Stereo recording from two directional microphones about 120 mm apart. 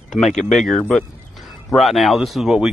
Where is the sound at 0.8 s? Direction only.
10° left (ahead or behind).